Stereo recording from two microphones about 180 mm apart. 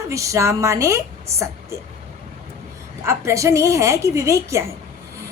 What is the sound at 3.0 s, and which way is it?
A woman's voice, 15° right (ahead or behind).